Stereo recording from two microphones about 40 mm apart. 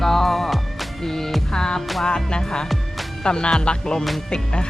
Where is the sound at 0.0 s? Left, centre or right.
Centre.